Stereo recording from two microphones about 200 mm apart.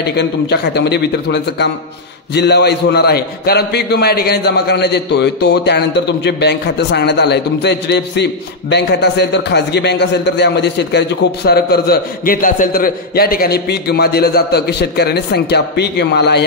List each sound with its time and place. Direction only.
0.0 s a man's voice: 55° left (ahead or behind)